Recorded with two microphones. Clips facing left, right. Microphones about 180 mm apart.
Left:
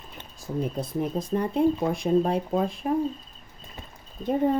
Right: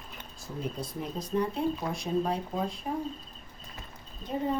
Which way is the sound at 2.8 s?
65° left (ahead or behind).